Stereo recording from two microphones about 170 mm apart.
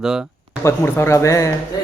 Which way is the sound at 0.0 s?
5° right (ahead or behind).